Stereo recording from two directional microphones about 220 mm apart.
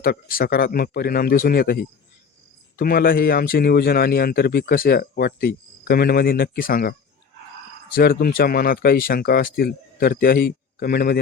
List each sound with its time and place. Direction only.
0.0 s a man's voice: 40° left (ahead or behind)